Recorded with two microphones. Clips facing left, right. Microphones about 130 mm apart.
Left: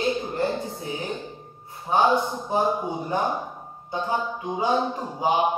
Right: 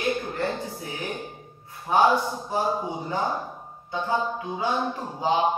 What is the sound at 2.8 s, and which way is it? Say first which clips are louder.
Speech: left 2 dB; 20° right (ahead or behind).